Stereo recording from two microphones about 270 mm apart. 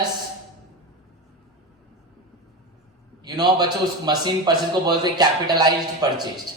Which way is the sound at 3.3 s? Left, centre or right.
Centre.